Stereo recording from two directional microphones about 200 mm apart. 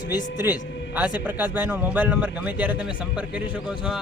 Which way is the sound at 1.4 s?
10° right (ahead or behind).